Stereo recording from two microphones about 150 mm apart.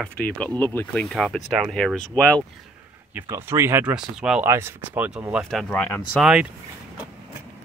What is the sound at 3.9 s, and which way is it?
Speech, 5° right (ahead or behind).